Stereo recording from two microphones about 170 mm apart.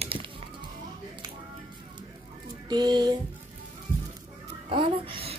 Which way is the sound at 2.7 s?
25° right (ahead or behind).